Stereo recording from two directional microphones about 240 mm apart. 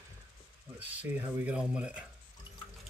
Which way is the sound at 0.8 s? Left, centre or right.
Centre.